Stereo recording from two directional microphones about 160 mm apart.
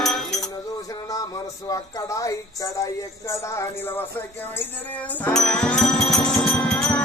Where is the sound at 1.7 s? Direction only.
20° left (ahead or behind).